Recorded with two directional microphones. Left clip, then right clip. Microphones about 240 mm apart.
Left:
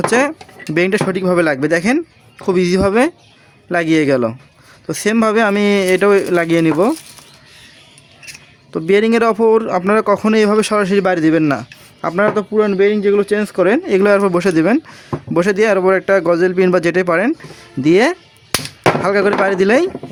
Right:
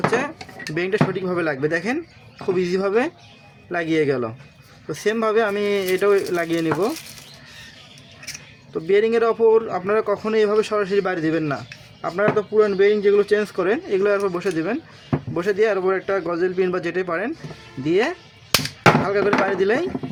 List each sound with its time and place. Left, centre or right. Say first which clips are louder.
0.1 s speech: left 8 dB; left
8.7 s speech: left 5 dB; left